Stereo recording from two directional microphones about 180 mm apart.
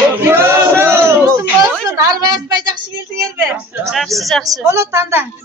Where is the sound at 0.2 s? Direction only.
15° right (ahead or behind).